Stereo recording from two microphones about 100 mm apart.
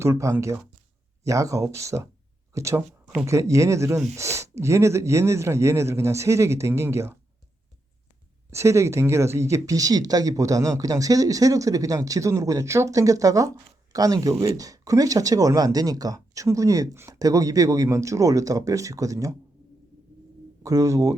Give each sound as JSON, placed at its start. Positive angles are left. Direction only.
{"t": 0.0, "sound": "speech", "side_deg": -30}
{"t": 8.4, "sound": "speech", "side_deg": -30}
{"t": 20.6, "sound": "speech", "side_deg": -35}